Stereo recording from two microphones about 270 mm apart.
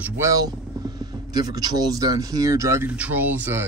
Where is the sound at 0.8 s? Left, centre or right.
Centre.